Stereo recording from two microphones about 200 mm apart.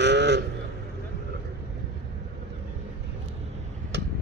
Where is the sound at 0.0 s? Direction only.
60° right (ahead or behind).